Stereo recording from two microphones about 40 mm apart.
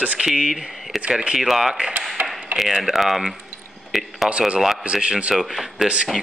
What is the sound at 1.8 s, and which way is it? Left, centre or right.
Speech, right.